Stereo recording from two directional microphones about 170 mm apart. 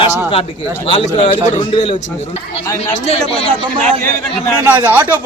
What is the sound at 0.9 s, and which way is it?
A man's voice, 30° left (ahead or behind).